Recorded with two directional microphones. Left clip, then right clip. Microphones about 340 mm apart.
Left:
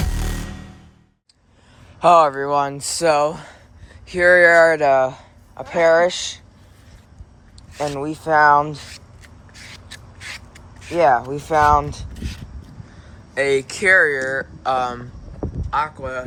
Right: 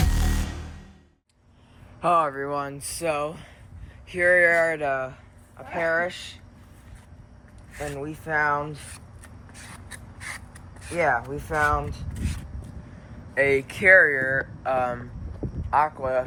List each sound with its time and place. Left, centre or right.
2.0 s speech: centre
7.9 s speech: centre
10.2 s a sound: centre
10.9 s speech: centre
13.3 s speech: centre
15.7 s speech: centre